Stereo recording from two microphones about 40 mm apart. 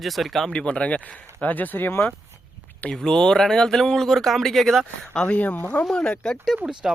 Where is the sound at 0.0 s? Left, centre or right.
Centre.